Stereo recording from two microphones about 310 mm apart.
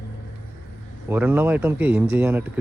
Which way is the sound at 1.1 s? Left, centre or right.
Centre.